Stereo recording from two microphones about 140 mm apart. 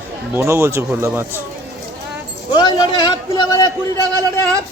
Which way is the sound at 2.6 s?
30° left (ahead or behind).